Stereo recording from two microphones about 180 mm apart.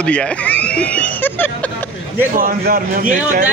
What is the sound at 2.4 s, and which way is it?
Speech, 55° right (ahead or behind).